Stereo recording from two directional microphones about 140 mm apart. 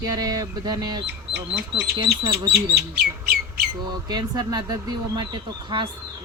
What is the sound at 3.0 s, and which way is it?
Bird, 90° right.